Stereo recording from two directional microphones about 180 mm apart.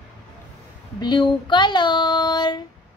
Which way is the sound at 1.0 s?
25° left (ahead or behind).